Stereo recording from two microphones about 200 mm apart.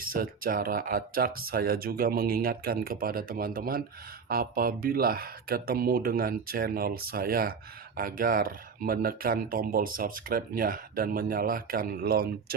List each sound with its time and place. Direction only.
0.0 s speech: 45° right (ahead or behind)